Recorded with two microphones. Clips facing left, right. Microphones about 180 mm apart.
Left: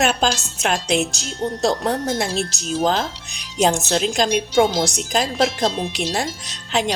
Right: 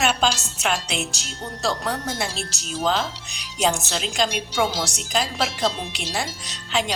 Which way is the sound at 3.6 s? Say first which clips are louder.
Left 5 dB; 50° left (ahead or behind).